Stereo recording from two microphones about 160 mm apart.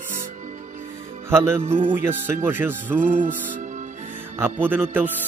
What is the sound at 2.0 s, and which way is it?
A man's voice, 15° right (ahead or behind).